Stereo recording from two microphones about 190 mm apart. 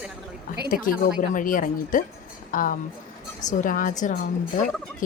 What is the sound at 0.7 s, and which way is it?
A woman's voice, 45° left (ahead or behind).